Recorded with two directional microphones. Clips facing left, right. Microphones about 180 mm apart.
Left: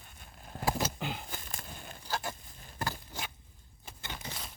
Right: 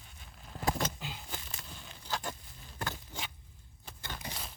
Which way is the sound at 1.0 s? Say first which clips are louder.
Left 5 dB; 55° left (ahead or behind).